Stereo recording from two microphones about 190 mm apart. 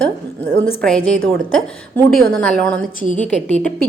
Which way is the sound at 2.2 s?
5° left (ahead or behind).